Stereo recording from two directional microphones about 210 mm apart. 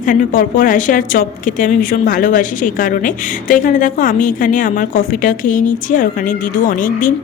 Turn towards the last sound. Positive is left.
turn(degrees=40)  # may be behind; listen again after turning